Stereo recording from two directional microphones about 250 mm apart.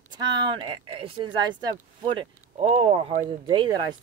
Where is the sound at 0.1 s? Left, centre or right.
Right.